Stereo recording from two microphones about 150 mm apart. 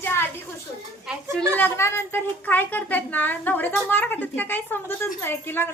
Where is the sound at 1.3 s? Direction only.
10° left (ahead or behind).